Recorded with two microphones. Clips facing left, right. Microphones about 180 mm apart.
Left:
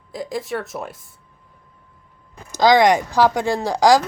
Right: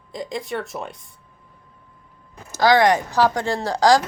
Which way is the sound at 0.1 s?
5° left (ahead or behind).